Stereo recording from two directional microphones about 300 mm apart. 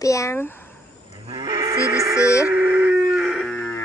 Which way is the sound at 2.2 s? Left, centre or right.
Centre.